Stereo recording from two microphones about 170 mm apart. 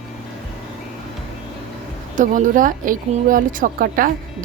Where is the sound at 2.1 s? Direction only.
50° right (ahead or behind).